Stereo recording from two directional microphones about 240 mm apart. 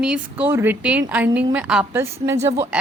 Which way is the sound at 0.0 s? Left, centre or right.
Centre.